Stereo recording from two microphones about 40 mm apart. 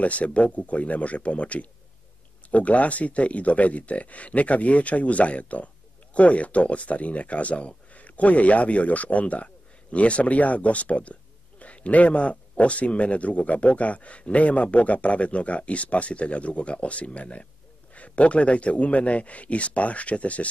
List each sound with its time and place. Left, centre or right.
0.0 s speech: left